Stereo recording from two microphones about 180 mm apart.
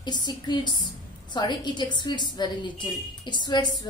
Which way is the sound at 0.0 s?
25° left (ahead or behind).